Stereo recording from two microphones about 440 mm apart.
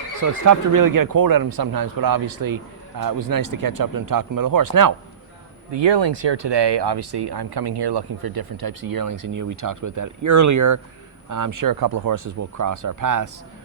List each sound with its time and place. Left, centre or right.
0.2 s speech: right
5.7 s speech: right